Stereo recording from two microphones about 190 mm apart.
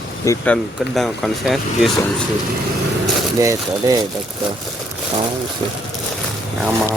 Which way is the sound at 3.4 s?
15° right (ahead or behind).